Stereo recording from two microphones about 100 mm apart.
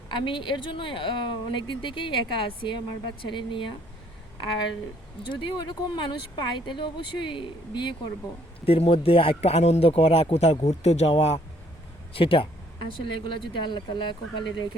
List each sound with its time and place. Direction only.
0.1 s speech: 55° left (ahead or behind)
5.2 s speech: 50° left (ahead or behind)
8.6 s speech: 70° left (ahead or behind); by 11.3 s 90° left
12.1 s speech: 65° left (ahead or behind)
13.2 s speech: 50° left (ahead or behind)